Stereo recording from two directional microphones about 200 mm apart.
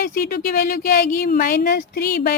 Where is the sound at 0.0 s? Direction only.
50° left (ahead or behind).